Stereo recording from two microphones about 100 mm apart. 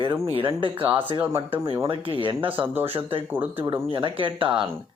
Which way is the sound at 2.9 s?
65° right (ahead or behind).